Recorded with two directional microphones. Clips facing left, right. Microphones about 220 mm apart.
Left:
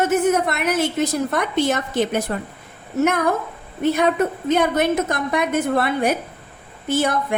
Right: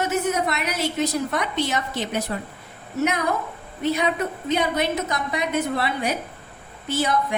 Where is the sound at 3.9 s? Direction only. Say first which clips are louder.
Left 5 dB; 50° left (ahead or behind).